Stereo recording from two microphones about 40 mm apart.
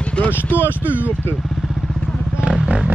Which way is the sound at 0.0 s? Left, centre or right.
Left.